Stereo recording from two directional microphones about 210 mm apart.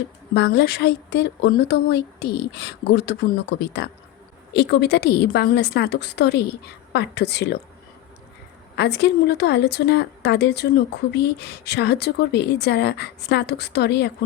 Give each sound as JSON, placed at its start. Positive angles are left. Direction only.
{"t": 0.3, "sound": "speech", "side_deg": 55}
{"t": 8.7, "sound": "speech", "side_deg": 55}